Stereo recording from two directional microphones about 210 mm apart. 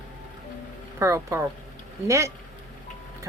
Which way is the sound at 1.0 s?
15° right (ahead or behind).